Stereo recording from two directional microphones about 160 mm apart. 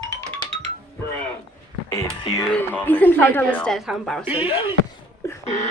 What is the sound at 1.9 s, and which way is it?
Speech, 25° left (ahead or behind).